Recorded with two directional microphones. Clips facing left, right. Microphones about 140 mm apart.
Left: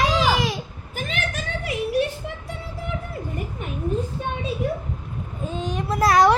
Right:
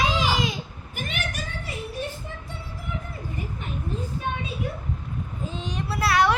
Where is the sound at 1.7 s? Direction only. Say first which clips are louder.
Left 11 dB; 90° left.